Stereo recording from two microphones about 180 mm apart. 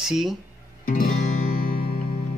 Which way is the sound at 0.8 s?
50° left (ahead or behind).